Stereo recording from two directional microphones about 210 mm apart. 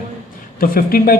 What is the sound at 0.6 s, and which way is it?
Speech, 45° left (ahead or behind).